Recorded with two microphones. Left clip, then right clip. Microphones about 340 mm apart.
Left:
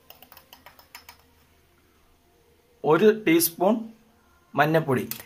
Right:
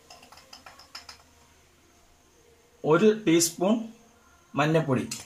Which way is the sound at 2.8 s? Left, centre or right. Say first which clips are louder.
Left 2 dB; left.